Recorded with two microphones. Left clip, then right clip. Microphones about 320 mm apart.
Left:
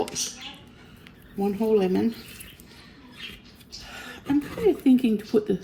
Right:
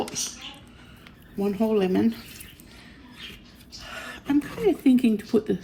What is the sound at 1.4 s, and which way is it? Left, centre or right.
Speech, right.